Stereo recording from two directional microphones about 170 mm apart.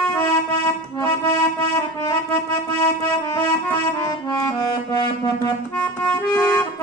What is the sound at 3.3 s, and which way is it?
Accordion, 20° left (ahead or behind).